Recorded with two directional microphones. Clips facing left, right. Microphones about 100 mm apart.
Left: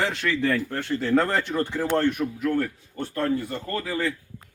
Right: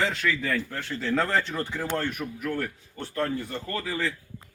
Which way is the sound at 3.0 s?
50° left (ahead or behind).